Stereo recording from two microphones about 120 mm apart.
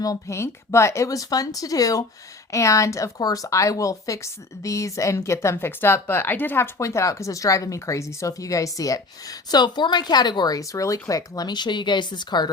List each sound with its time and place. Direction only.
0.0 s speech: 25° left (ahead or behind)